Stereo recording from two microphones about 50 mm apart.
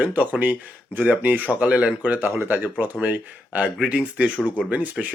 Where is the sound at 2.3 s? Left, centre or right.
Right.